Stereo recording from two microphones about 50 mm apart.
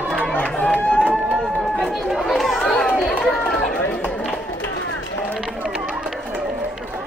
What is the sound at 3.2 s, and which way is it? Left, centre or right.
Run, centre.